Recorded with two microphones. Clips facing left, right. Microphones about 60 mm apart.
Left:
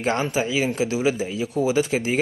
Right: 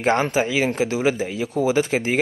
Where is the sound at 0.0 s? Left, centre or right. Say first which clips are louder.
Right 3 dB; right.